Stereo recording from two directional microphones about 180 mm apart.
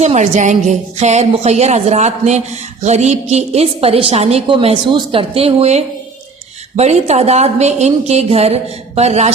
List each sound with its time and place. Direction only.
0.0 s a woman's voice: 40° right (ahead or behind)